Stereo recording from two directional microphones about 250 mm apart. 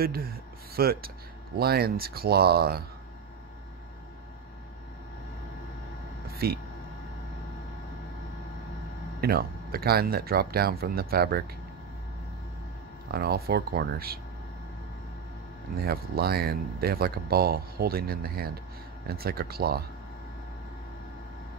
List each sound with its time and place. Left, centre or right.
0.0 s speech: right
6.3 s speech: right
9.2 s speech: right
13.1 s speech: right
15.8 s speech: right